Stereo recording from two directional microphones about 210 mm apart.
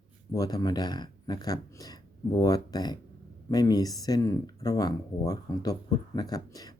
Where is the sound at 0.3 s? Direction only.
20° left (ahead or behind).